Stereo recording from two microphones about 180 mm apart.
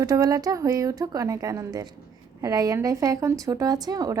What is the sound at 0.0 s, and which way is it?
A woman's voice, 20° right (ahead or behind).